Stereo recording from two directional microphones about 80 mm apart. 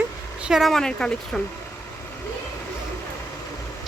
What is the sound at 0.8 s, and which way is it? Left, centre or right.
Speech, centre.